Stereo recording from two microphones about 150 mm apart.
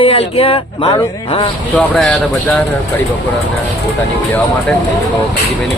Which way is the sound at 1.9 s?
5° left (ahead or behind).